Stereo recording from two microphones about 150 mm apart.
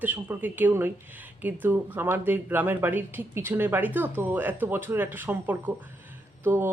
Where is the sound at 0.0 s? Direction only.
10° right (ahead or behind).